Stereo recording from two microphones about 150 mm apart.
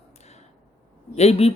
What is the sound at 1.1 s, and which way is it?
Speech, 45° left (ahead or behind).